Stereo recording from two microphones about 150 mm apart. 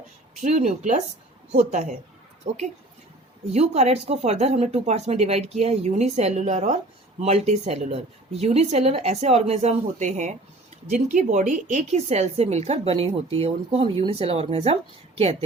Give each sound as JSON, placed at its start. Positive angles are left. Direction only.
{"t": 0.3, "sound": "a woman's voice", "side_deg": -50}